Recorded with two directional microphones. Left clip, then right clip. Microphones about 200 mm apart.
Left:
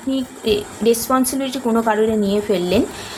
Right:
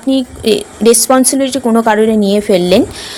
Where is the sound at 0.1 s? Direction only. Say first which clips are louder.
Right 7 dB; 40° right (ahead or behind).